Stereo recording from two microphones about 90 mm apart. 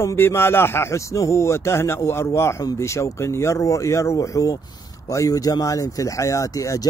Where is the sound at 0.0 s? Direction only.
30° left (ahead or behind).